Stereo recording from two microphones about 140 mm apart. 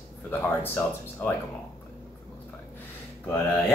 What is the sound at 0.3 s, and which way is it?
Speech, 15° left (ahead or behind).